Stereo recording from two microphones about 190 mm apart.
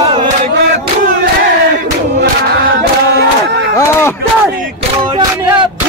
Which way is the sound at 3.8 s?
15° left (ahead or behind).